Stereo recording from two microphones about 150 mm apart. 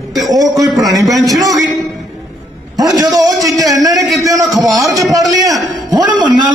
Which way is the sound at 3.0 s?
25° right (ahead or behind).